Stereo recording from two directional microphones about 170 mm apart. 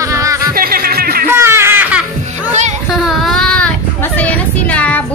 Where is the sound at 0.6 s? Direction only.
60° right (ahead or behind).